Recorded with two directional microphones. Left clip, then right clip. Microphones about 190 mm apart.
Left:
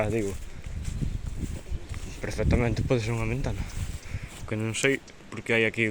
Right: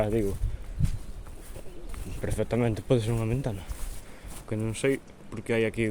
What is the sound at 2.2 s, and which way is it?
Speech, 15° right (ahead or behind).